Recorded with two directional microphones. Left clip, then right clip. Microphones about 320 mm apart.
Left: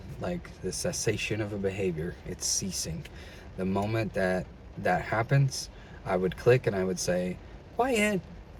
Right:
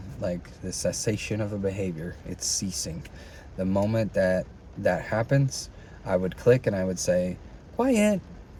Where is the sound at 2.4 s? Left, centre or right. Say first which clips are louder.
Right 2 dB; centre.